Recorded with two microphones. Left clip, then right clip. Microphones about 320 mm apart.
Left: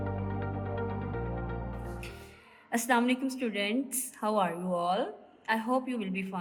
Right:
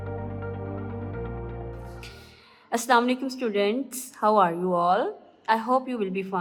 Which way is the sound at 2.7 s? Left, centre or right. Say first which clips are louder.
Right 6 dB; right.